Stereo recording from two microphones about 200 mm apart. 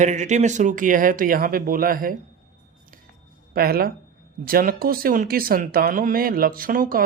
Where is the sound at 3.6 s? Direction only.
50° right (ahead or behind).